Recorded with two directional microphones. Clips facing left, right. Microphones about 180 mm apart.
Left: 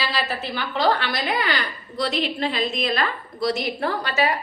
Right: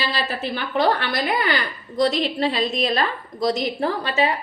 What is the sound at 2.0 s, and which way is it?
A woman's voice, 40° right (ahead or behind).